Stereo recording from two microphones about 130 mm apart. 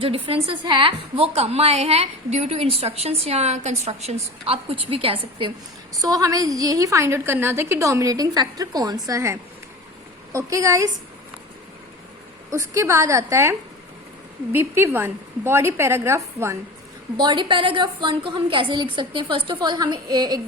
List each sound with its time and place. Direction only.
0.0 s a woman's voice: 45° right (ahead or behind)
6.0 s a woman's voice: 25° right (ahead or behind)
12.5 s a woman's voice: 20° right (ahead or behind)
17.2 s a woman's voice: 35° right (ahead or behind)